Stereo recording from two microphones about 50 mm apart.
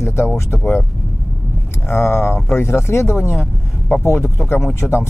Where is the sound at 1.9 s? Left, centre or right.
Left.